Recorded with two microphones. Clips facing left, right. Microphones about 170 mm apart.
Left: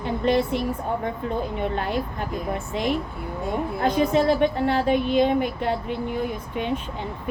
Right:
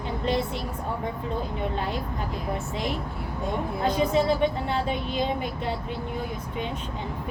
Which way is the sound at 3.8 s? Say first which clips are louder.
Left 3 dB; 60° left (ahead or behind).